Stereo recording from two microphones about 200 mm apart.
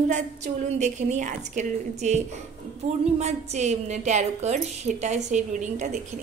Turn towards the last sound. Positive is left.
turn(degrees=-35)  # may be behind; listen again after turning